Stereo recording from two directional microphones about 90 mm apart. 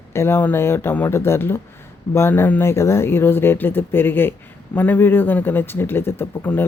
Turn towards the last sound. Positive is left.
turn(degrees=20)  # may be behind; listen again after turning